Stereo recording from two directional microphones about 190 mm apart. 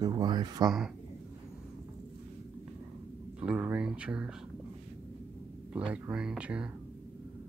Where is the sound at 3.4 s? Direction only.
5° right (ahead or behind).